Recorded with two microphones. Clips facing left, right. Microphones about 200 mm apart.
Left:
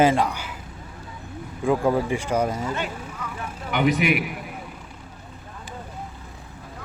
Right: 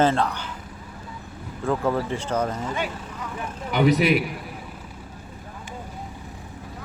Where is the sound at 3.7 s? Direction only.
35° right (ahead or behind).